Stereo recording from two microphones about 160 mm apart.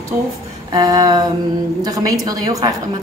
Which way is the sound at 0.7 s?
25° right (ahead or behind).